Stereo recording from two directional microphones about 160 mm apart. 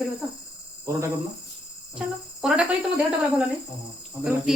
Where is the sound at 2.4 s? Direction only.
5° right (ahead or behind).